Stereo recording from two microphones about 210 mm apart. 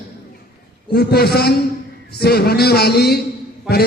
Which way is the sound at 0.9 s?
50° left (ahead or behind).